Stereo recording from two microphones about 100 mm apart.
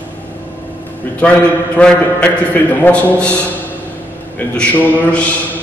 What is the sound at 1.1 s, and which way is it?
A man's voice, 15° left (ahead or behind).